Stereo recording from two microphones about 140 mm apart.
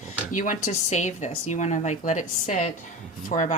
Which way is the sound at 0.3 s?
70° left (ahead or behind).